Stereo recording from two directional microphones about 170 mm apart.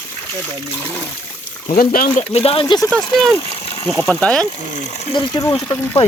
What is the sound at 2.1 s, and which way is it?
Speech, 35° left (ahead or behind).